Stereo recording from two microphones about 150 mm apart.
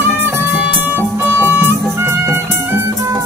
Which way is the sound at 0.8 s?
15° right (ahead or behind).